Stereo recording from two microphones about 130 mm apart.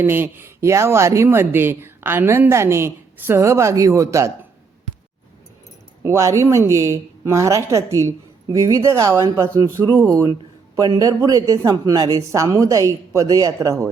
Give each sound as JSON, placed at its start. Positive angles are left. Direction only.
{"t": 0.0, "sound": "speech", "side_deg": -15}
{"t": 6.0, "sound": "speech", "side_deg": -20}